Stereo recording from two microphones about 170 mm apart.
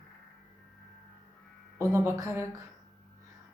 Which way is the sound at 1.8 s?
15° right (ahead or behind).